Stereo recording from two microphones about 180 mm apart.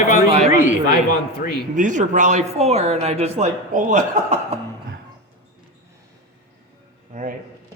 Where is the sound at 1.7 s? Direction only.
45° right (ahead or behind).